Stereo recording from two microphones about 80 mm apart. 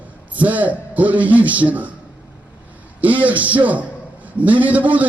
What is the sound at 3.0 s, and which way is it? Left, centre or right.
A man's voice, centre.